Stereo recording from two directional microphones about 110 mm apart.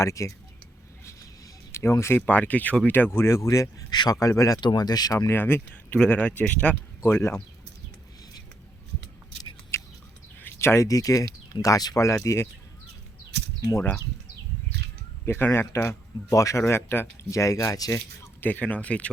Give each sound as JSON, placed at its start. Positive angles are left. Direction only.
{"t": 0.0, "sound": "speech", "side_deg": 30}
{"t": 1.7, "sound": "speech", "side_deg": 25}
{"t": 5.3, "sound": "speech", "side_deg": 20}
{"t": 9.7, "sound": "bird", "side_deg": 25}
{"t": 10.4, "sound": "speech", "side_deg": 25}
{"t": 13.7, "sound": "speech", "side_deg": 25}
{"t": 15.3, "sound": "speech", "side_deg": 20}